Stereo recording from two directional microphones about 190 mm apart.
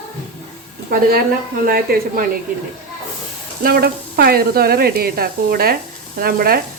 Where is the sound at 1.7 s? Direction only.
50° right (ahead or behind).